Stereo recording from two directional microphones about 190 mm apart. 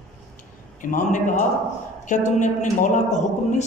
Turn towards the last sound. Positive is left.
turn(degrees=40)  # may be behind; listen again after turning